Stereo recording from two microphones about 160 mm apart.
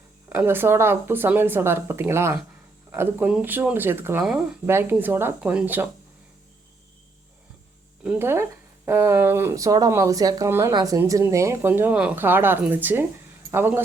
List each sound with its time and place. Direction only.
0.3 s speech: 10° right (ahead or behind)
4.2 s speech: centre (ahead or behind)
4.6 s speech: 15° right (ahead or behind)
8.0 s speech: 15° right (ahead or behind)